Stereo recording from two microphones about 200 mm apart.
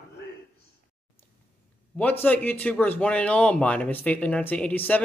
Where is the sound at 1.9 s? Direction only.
5° left (ahead or behind).